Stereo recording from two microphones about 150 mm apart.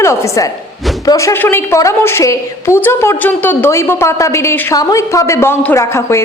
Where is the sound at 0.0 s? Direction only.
20° left (ahead or behind).